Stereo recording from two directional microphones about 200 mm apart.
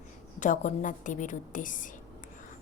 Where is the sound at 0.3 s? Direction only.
40° left (ahead or behind).